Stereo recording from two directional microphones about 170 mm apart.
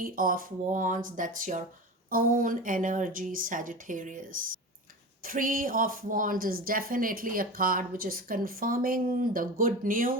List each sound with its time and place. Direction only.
0.0 s a woman's voice: 55° right (ahead or behind)
5.2 s a woman's voice: 55° right (ahead or behind)